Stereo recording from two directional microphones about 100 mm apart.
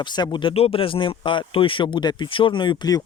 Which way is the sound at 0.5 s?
75° left (ahead or behind).